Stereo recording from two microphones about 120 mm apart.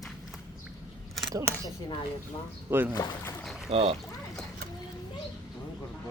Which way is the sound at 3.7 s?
60° right (ahead or behind).